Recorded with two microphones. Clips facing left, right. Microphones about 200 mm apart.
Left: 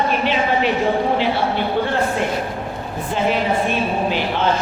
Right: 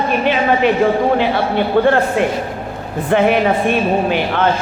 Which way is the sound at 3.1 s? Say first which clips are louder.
Right 7 dB; 65° right (ahead or behind).